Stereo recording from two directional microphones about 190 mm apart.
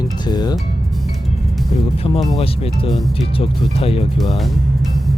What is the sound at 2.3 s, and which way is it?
Speech, 30° left (ahead or behind).